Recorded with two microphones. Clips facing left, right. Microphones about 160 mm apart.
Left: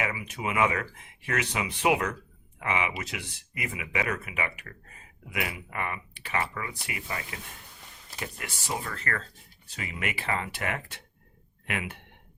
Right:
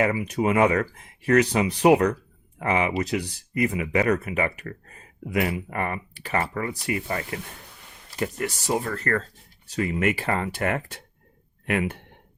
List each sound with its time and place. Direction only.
0.0 s speech: 40° right (ahead or behind)